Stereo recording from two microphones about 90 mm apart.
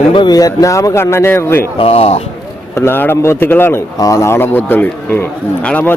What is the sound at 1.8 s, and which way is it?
Speech, 90° left.